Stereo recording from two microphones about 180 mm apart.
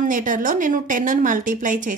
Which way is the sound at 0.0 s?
50° right (ahead or behind).